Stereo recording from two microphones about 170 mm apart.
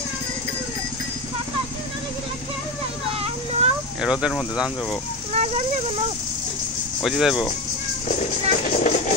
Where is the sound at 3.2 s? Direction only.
35° right (ahead or behind).